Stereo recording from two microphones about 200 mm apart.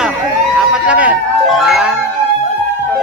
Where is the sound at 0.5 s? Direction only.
5° right (ahead or behind).